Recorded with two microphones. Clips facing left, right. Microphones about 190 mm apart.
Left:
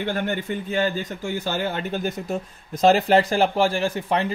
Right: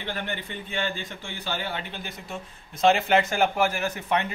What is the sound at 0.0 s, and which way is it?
A man's voice, 45° left (ahead or behind).